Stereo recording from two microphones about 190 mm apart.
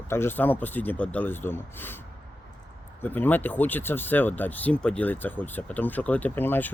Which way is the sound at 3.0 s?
10° left (ahead or behind).